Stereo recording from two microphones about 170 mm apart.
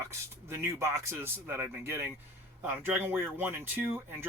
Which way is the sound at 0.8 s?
15° right (ahead or behind).